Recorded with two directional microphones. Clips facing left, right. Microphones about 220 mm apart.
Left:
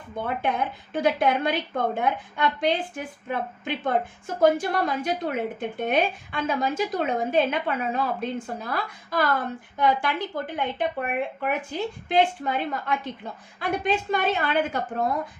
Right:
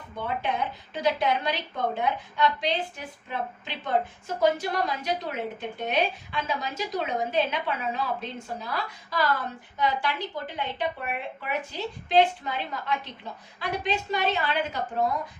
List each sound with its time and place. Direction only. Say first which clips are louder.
0.9 s a woman's voice: left 3 dB; 50° left (ahead or behind)